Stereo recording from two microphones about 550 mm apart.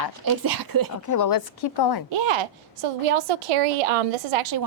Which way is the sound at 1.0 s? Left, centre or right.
Left.